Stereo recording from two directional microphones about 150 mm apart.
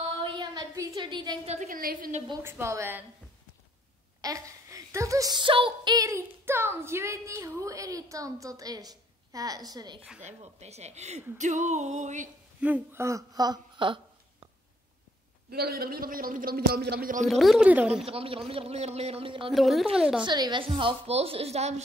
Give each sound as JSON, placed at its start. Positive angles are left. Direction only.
{"t": 0.2, "sound": "a sound", "side_deg": -25}
{"t": 1.4, "sound": "speech", "side_deg": -45}
{"t": 1.7, "sound": "a woman's voice", "side_deg": -70}
{"t": 2.4, "sound": "a woman's voice", "side_deg": -15}
{"t": 4.2, "sound": "speech", "side_deg": -20}
{"t": 10.2, "sound": "speech", "side_deg": -45}
{"t": 12.5, "sound": "speech", "side_deg": -10}
{"t": 15.5, "sound": "a man's voice", "side_deg": -90}
{"t": 17.3, "sound": "speech", "side_deg": 0}
{"t": 18.0, "sound": "a woman's voice", "side_deg": -40}
{"t": 19.5, "sound": "speech", "side_deg": 0}
{"t": 20.2, "sound": "a woman's voice", "side_deg": -30}